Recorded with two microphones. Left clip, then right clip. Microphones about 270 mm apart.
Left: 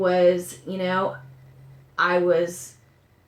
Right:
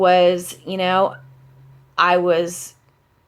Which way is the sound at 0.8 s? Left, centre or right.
Right.